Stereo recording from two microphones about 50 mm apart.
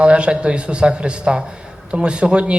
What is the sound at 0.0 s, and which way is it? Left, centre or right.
Speech, right.